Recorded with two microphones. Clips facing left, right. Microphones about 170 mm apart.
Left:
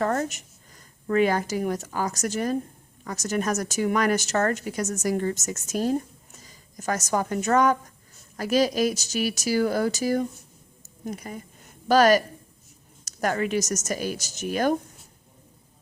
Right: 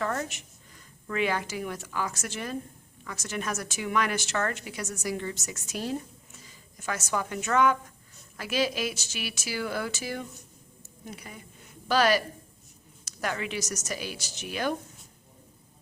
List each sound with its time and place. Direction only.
0.0 s a woman's voice: 40° left (ahead or behind)